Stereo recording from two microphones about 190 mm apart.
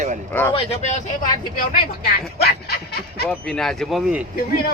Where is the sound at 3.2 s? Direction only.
5° left (ahead or behind).